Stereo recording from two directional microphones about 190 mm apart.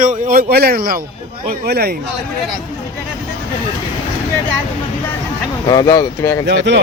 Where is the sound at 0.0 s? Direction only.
45° right (ahead or behind).